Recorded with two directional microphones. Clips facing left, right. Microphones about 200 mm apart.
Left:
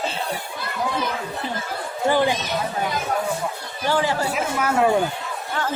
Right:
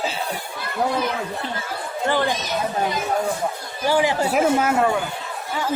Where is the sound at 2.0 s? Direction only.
15° left (ahead or behind).